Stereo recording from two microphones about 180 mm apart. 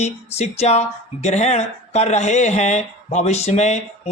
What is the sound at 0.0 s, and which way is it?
Speech, 35° left (ahead or behind).